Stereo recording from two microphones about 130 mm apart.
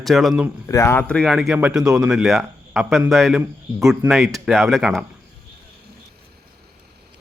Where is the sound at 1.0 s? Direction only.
5° left (ahead or behind).